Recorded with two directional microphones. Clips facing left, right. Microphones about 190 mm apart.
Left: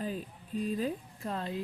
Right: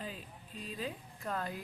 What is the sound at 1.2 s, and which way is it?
Speech, 25° left (ahead or behind).